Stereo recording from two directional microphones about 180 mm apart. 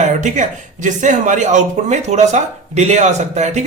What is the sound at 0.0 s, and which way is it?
Speech, 45° right (ahead or behind).